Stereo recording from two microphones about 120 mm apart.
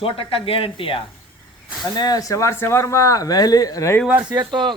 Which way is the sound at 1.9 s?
35° left (ahead or behind).